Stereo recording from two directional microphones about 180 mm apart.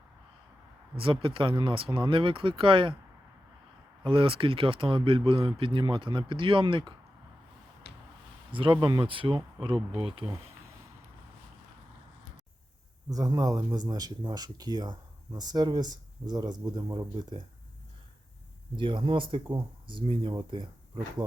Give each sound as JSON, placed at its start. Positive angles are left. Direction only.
{"t": 0.9, "sound": "speech", "side_deg": -30}
{"t": 4.0, "sound": "speech", "side_deg": -30}
{"t": 7.9, "sound": "a sound", "side_deg": 65}
{"t": 8.5, "sound": "speech", "side_deg": -25}
{"t": 13.1, "sound": "speech", "side_deg": -20}
{"t": 18.8, "sound": "speech", "side_deg": -25}